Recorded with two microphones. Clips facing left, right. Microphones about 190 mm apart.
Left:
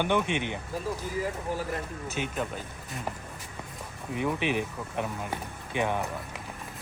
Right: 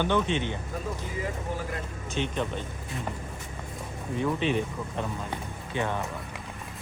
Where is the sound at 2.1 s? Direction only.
5° left (ahead or behind).